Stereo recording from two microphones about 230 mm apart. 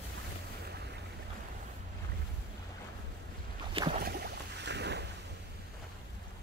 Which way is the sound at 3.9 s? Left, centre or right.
Right.